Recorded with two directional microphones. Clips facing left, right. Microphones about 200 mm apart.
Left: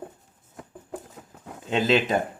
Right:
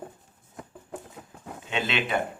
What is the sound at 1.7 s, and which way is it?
Speech, 40° left (ahead or behind).